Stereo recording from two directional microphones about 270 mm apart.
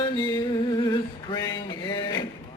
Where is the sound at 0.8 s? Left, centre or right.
Centre.